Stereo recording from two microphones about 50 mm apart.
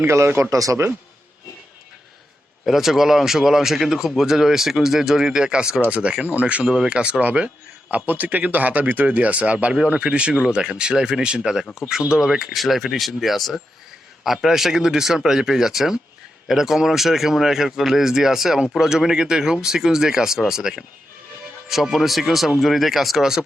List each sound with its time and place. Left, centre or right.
0.5 s speech: right
2.6 s speech: centre; by 6.7 s right
6.7 s speech: centre